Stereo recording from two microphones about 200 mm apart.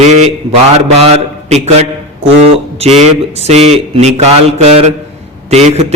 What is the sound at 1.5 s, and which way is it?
A man's voice, 30° right (ahead or behind).